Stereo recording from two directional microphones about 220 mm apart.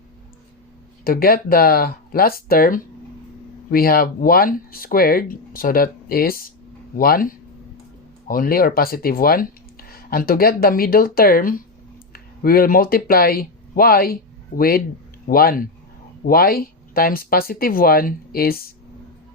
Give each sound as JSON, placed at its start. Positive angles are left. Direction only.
{"t": 1.0, "sound": "speech", "side_deg": 40}